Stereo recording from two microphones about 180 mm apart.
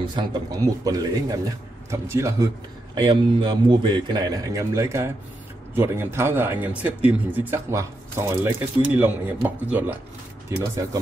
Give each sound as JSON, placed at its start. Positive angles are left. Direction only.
{"t": 0.0, "sound": "speech", "side_deg": -25}